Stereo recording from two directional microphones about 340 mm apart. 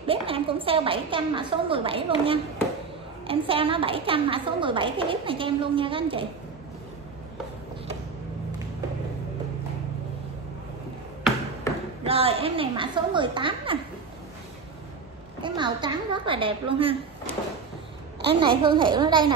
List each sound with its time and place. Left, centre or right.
0.0 s a woman's voice: centre
12.0 s a woman's voice: centre
15.4 s a woman's voice: centre
18.2 s a woman's voice: centre